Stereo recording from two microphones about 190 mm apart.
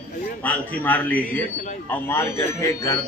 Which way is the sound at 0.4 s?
10° left (ahead or behind).